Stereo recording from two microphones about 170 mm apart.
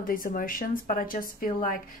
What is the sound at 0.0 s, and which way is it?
A woman's voice, 55° left (ahead or behind).